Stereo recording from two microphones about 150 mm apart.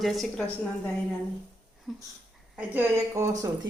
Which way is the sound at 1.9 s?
Centre (ahead or behind).